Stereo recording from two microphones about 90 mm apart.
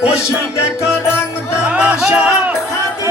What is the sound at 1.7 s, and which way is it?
Music, 15° right (ahead or behind).